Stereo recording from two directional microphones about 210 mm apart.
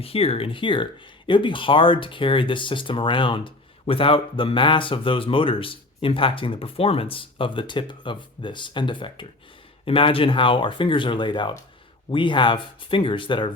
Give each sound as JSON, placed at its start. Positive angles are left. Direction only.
{"t": 0.0, "sound": "speech", "side_deg": 25}